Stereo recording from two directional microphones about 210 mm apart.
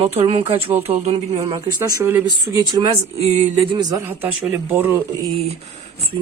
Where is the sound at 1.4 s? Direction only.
15° right (ahead or behind).